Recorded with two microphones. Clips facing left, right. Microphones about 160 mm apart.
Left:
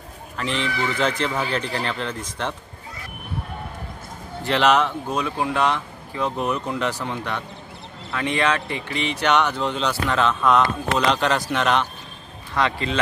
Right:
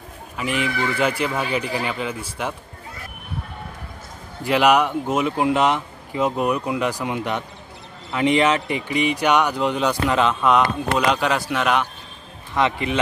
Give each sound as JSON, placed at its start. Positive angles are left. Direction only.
{"t": 0.4, "sound": "speech", "side_deg": -10}
{"t": 4.4, "sound": "speech", "side_deg": -10}
{"t": 12.5, "sound": "speech", "side_deg": -20}